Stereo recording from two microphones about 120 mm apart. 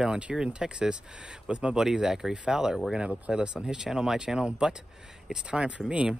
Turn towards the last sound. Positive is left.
turn(degrees=-10)  # may be behind; listen again after turning